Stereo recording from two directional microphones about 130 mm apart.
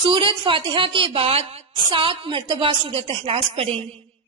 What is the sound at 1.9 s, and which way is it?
A woman's voice, 40° right (ahead or behind).